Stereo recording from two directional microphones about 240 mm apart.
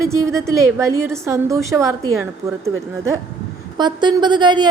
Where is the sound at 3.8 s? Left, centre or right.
Centre.